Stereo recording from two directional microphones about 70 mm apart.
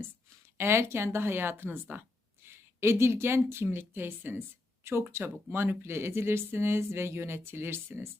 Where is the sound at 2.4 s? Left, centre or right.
Right.